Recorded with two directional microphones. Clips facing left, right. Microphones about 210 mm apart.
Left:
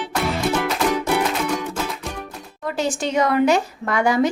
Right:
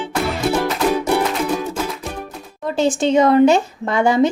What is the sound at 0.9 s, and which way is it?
Music, 35° right (ahead or behind).